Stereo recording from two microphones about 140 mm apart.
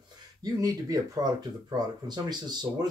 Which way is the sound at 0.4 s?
25° right (ahead or behind).